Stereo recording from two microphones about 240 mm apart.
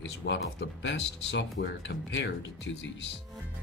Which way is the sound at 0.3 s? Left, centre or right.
Left.